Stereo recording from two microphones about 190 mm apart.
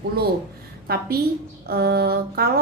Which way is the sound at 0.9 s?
55° right (ahead or behind).